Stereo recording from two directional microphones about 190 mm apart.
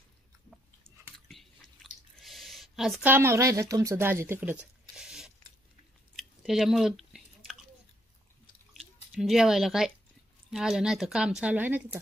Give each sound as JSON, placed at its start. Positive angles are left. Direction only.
{"t": 1.3, "sound": "drip", "side_deg": 0}
{"t": 4.9, "sound": "a sound", "side_deg": -5}
{"t": 6.1, "sound": "chewing", "side_deg": 0}
{"t": 8.7, "sound": "speech", "side_deg": 0}